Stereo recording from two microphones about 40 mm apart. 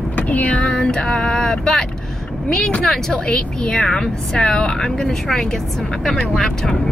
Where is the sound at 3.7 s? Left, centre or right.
Centre.